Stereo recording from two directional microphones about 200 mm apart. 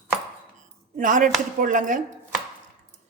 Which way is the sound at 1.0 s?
40° right (ahead or behind).